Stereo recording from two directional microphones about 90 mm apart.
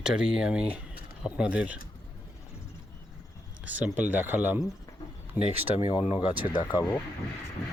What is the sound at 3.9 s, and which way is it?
Speech, 20° right (ahead or behind).